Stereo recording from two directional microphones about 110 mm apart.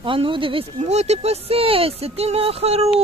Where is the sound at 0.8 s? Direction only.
90° right.